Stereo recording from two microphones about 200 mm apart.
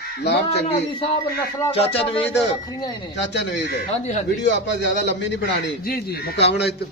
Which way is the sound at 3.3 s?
60° left (ahead or behind).